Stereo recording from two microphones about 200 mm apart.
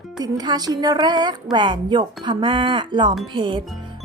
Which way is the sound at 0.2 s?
20° right (ahead or behind).